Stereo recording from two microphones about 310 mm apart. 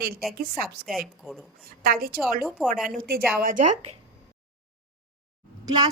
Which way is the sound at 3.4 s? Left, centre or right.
Right.